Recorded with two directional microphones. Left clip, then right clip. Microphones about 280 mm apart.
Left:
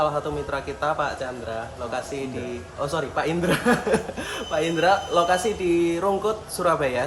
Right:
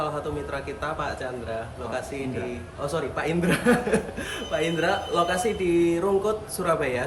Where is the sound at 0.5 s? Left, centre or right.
Centre.